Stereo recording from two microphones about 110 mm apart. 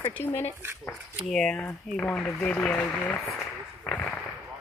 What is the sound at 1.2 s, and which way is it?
Speech, 5° left (ahead or behind).